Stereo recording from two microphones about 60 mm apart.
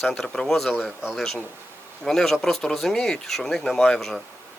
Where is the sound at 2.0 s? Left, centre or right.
Centre.